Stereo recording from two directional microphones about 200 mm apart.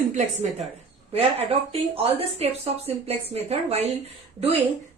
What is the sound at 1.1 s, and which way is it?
A woman's voice, 30° right (ahead or behind).